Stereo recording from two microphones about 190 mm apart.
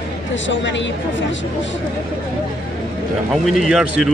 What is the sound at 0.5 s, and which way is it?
Speech, 75° left (ahead or behind).